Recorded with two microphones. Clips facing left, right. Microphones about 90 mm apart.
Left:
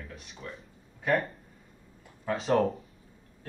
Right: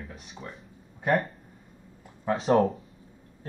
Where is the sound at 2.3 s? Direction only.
35° right (ahead or behind).